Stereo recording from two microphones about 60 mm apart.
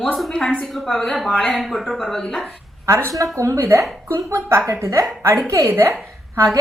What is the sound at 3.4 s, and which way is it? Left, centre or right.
A woman's voice, right.